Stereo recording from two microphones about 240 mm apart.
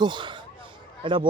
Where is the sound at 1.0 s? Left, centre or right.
Right.